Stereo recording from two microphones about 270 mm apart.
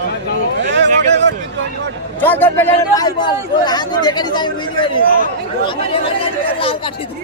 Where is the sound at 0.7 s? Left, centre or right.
Right.